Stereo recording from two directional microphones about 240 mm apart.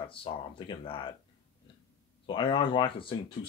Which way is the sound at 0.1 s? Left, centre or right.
Left.